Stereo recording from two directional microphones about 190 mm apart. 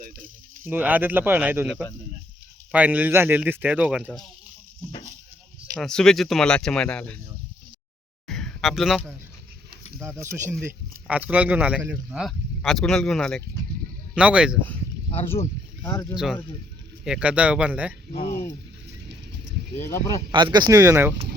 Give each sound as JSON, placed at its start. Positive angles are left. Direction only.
{"t": 0.6, "sound": "speech", "side_deg": -10}
{"t": 5.8, "sound": "speech", "side_deg": 5}
{"t": 8.3, "sound": "a sound", "side_deg": 0}
{"t": 10.0, "sound": "speech", "side_deg": -15}
{"t": 15.8, "sound": "speech", "side_deg": 15}
{"t": 16.1, "sound": "speech", "side_deg": 0}
{"t": 18.1, "sound": "speech", "side_deg": 50}
{"t": 19.8, "sound": "speech", "side_deg": 15}
{"t": 20.3, "sound": "speech", "side_deg": -25}